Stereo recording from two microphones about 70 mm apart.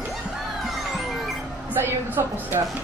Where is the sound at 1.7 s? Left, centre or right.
Right.